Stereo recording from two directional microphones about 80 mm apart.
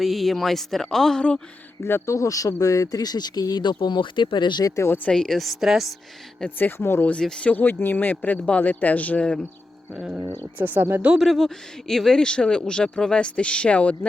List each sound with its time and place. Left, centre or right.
0.0 s speech: centre
1.8 s speech: left
4.6 s speech: left
5.0 s speech: centre
6.6 s speech: left
7.1 s speech: centre
9.9 s speech: centre
11.1 s speech: centre